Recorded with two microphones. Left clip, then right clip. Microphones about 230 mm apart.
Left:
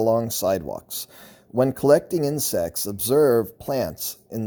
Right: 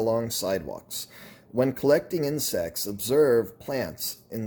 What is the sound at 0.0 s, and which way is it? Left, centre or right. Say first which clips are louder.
Speech: left 5 dB; left.